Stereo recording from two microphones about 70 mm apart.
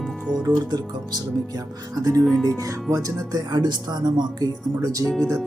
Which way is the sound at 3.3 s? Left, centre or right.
Right.